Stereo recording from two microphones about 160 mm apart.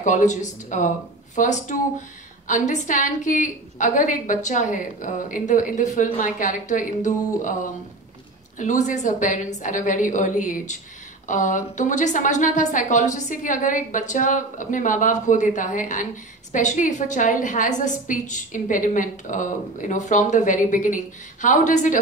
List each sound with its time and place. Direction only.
0.0 s a woman's voice: 50° left (ahead or behind)